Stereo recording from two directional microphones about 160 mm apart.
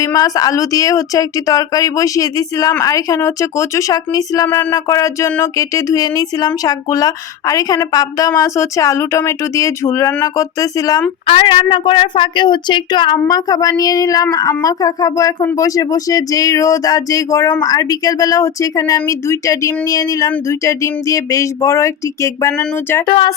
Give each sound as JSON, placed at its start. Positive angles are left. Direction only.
{"t": 0.0, "sound": "speech", "side_deg": 20}
{"t": 11.3, "sound": "speech", "side_deg": 35}
{"t": 23.0, "sound": "speech", "side_deg": 30}